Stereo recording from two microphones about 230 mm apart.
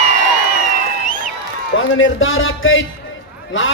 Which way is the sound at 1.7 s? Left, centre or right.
Left.